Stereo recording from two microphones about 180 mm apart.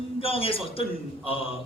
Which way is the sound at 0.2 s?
30° left (ahead or behind).